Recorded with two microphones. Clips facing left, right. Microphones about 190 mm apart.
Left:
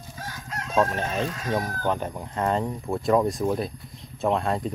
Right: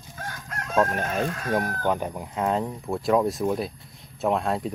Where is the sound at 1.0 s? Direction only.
55° right (ahead or behind).